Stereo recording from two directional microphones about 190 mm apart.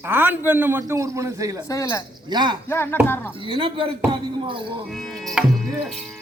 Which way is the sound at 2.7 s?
10° left (ahead or behind).